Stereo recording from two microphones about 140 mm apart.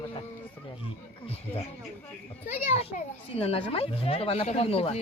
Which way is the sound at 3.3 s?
45° left (ahead or behind).